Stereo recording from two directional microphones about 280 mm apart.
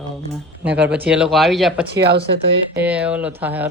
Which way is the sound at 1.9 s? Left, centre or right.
Right.